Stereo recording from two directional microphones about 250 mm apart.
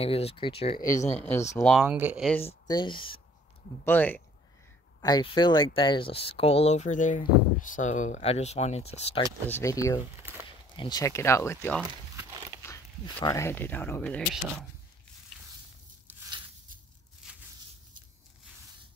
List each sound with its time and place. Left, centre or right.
0.0 s speech: left
1.6 s speech: centre
2.7 s speech: centre
3.8 s speech: centre; by 9.3 s left
9.5 s speech: centre
11.9 s crumpling: centre
12.6 s speech: centre